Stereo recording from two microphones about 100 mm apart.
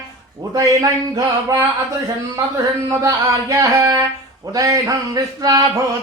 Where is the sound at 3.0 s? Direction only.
30° right (ahead or behind).